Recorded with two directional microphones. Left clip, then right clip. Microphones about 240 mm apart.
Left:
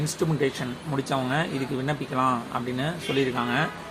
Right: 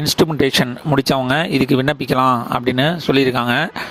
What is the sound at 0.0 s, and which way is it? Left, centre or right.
Speech, right.